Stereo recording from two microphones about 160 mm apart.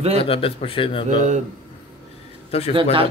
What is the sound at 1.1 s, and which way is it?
Speech, 50° right (ahead or behind).